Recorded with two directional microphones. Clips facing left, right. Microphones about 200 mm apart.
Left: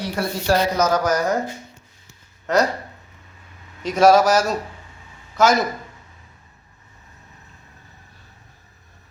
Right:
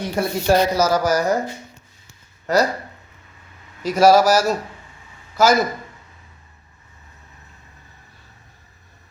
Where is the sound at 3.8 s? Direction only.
Centre (ahead or behind).